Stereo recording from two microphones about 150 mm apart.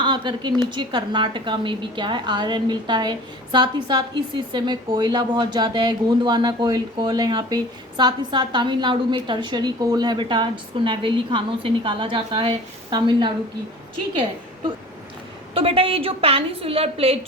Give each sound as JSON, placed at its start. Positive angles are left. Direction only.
{"t": 0.0, "sound": "a woman's voice", "side_deg": -30}
{"t": 15.5, "sound": "a woman's voice", "side_deg": -40}